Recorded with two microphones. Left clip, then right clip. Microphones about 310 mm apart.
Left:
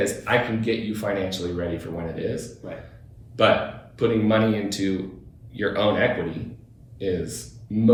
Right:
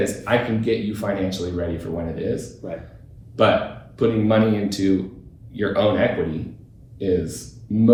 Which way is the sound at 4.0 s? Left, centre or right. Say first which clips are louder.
Right 2 dB; centre.